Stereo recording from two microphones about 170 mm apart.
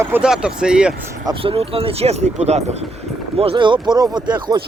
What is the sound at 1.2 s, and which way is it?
Speech, 30° right (ahead or behind).